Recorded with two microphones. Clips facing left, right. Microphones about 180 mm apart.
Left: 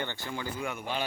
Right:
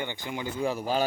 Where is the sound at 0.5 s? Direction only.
35° right (ahead or behind).